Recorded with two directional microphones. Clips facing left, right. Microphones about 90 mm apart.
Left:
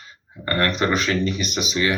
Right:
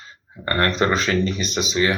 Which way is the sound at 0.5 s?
35° right (ahead or behind).